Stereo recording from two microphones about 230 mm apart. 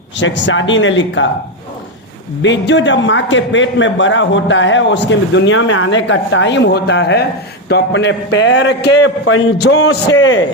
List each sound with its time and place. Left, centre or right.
0.2 s a man's voice: left
2.4 s a man's voice: left